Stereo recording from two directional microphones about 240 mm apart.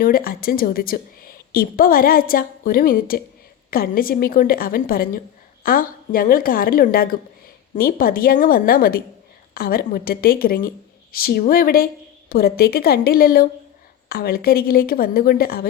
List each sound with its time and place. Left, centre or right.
0.0 s a woman's voice: left